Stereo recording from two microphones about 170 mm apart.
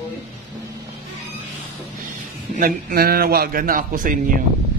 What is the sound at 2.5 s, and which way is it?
A man's voice, 55° right (ahead or behind).